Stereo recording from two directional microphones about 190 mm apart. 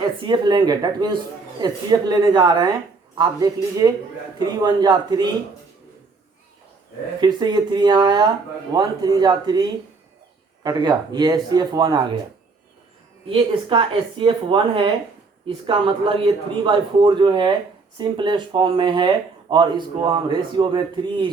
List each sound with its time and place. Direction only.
0.2 s speech: 20° right (ahead or behind)
7.2 s speech: 20° right (ahead or behind)
13.2 s speech: 25° right (ahead or behind)